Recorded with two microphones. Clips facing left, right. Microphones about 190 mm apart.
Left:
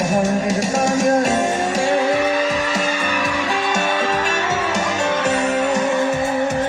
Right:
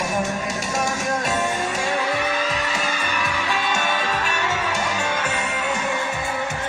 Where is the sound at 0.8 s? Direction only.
40° left (ahead or behind).